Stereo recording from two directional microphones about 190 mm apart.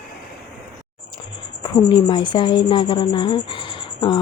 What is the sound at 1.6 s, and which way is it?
A woman's voice, 25° left (ahead or behind).